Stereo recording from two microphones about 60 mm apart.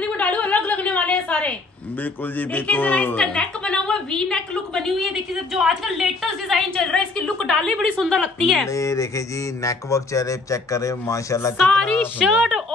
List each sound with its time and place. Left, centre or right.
0.0 s a sound: left
2.3 s speech: left
3.2 s a woman's voice: centre
5.1 s a woman's voice: centre
6.7 s a woman's voice: centre
8.6 s speech: left
11.5 s a woman's voice: centre